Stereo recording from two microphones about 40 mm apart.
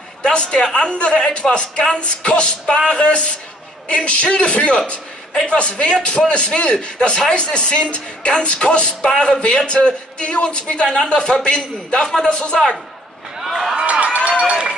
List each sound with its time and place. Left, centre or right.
0.2 s speech: left
13.4 s a sound: centre
13.8 s run: right